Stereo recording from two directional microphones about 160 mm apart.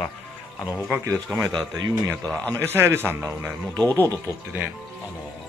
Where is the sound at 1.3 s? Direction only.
15° right (ahead or behind).